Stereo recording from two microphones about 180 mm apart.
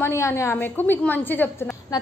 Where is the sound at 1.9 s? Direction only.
20° left (ahead or behind).